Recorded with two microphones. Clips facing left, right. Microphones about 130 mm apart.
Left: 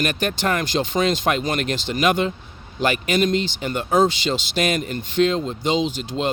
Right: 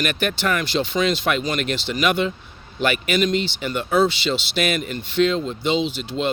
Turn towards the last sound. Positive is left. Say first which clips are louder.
# even
turn(degrees=45)  # may be behind; listen again after turning